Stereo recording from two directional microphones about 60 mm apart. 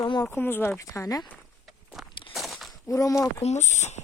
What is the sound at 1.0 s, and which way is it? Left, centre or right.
Speech, left.